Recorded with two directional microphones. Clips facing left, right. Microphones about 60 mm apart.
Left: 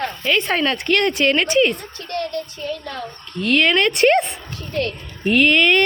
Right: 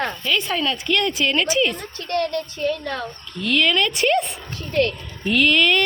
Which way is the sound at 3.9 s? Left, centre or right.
Left.